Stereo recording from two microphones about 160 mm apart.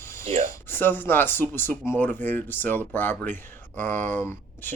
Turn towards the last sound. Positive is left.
turn(degrees=15)  # may be behind; listen again after turning